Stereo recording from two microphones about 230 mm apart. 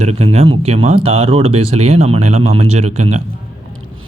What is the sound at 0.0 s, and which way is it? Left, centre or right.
A man's voice, right.